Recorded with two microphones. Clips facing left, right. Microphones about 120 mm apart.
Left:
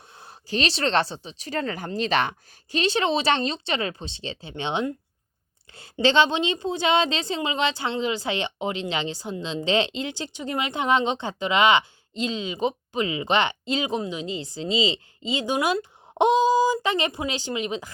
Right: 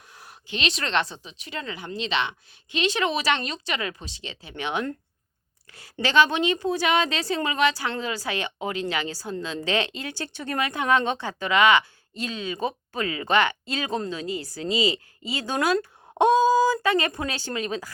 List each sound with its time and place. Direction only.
0.1 s a woman's voice: 30° left (ahead or behind)